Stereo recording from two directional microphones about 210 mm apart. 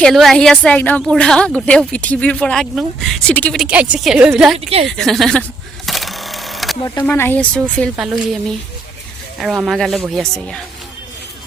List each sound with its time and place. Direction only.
0.0 s speech: centre (ahead or behind)
4.5 s speech: 30° right (ahead or behind)
4.9 s sewing machine: centre (ahead or behind)
6.8 s speech: 10° left (ahead or behind)